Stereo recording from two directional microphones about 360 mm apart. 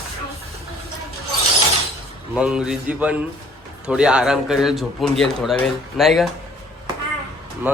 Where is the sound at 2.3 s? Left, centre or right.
Centre.